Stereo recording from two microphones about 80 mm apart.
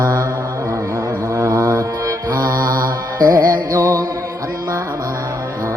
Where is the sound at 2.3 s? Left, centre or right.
Right.